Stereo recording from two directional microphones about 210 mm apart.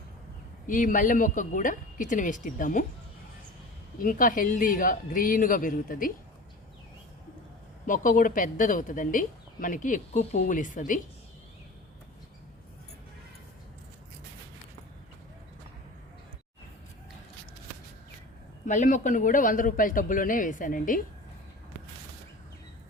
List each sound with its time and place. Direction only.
0.7 s speech: 40° left (ahead or behind)
4.0 s speech: 40° left (ahead or behind)
7.9 s speech: 40° left (ahead or behind)
18.6 s speech: 35° left (ahead or behind)